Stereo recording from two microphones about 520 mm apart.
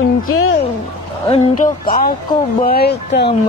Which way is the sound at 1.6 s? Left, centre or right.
Centre.